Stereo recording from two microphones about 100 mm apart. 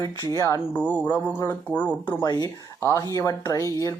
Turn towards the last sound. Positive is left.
turn(degrees=35)  # may be behind; listen again after turning